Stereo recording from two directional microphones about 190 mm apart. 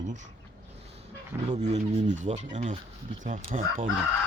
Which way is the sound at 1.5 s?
35° right (ahead or behind).